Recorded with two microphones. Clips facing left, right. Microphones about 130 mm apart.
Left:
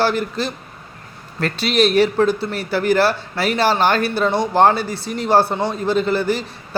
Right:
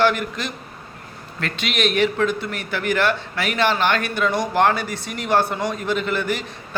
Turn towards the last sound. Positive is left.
turn(degrees=30)  # may be behind; listen again after turning